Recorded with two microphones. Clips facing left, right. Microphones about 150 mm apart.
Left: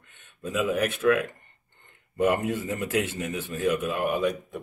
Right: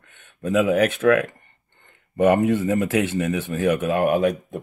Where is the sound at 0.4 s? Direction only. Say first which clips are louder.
Right 7 dB; 70° right (ahead or behind).